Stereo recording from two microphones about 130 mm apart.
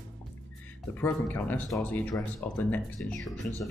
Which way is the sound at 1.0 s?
15° left (ahead or behind).